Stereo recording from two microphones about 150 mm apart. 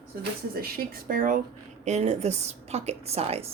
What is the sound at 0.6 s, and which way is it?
Speech, 75° right (ahead or behind).